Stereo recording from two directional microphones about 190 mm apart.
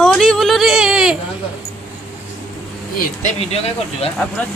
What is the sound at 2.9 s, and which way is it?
Speech, 50° left (ahead or behind).